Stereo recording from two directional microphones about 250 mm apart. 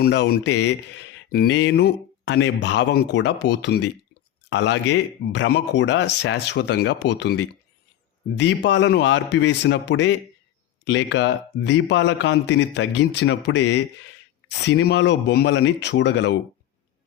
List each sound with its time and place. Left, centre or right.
0.0 s speech: left